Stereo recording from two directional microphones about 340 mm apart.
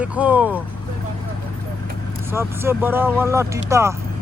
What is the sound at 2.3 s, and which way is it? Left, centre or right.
Speech, centre.